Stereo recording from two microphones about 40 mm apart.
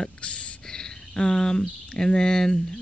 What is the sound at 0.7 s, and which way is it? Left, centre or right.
Cricket, centre.